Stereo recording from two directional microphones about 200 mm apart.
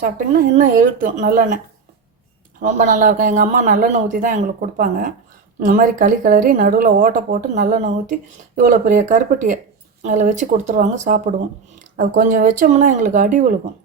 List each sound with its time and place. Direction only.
0.5 s speech: 40° right (ahead or behind)
2.6 s speech: 40° right (ahead or behind)